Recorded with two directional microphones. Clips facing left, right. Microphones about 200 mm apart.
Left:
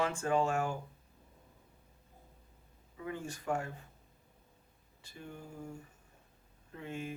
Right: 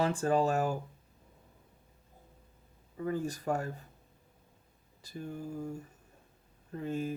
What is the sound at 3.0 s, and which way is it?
Speech, 40° right (ahead or behind).